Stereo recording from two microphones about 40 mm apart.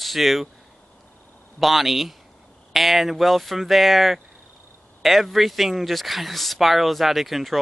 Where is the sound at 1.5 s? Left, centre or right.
Centre.